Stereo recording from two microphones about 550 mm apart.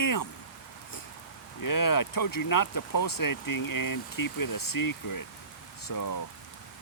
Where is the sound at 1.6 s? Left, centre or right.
Left.